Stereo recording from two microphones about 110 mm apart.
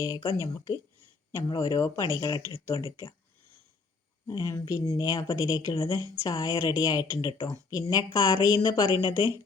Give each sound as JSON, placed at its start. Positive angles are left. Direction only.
{"t": 0.3, "sound": "speech", "side_deg": 30}
{"t": 4.3, "sound": "speech", "side_deg": 35}